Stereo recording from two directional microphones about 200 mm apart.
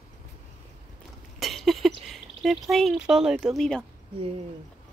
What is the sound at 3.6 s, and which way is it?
Speech, 5° left (ahead or behind).